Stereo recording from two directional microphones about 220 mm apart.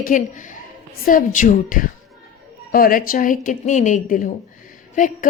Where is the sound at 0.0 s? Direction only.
35° left (ahead or behind).